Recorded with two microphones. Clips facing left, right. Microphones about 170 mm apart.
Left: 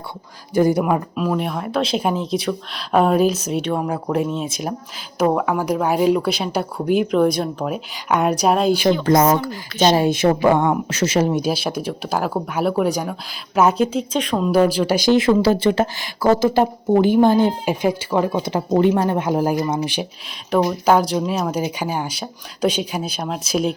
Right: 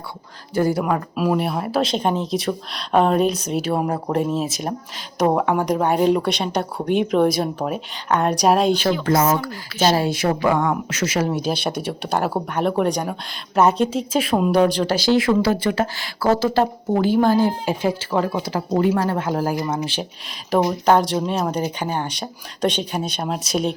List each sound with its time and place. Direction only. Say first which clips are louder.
0.5 s speech: left 3 dB; 15° left (ahead or behind)
1.1 s speech: right 1 dB; 5° right (ahead or behind)
9.9 s speech: left 4 dB; 20° left (ahead or behind)
11.5 s speech: left 1 dB; centre (ahead or behind)
14.5 s speech: left 4 dB; 5° left (ahead or behind)
20.5 s speech: left 1 dB; centre (ahead or behind)